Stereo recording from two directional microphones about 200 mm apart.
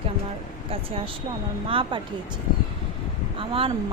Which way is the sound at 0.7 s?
30° right (ahead or behind).